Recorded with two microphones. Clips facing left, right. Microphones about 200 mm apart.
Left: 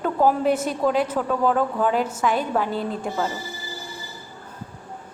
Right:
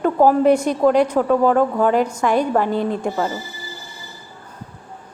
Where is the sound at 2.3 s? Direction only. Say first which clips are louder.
Right 6 dB; 45° right (ahead or behind).